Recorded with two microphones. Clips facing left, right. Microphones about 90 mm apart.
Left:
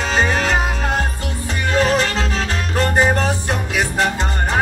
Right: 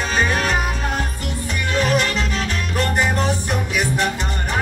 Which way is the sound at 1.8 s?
35° left (ahead or behind).